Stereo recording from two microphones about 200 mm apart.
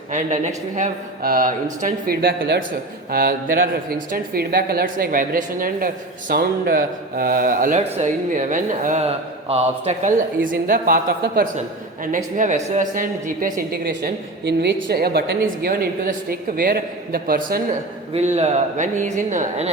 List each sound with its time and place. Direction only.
0.1 s a woman's voice: 40° right (ahead or behind)
2.2 s a woman's voice: 50° right (ahead or behind)
18.3 s speech: 35° right (ahead or behind)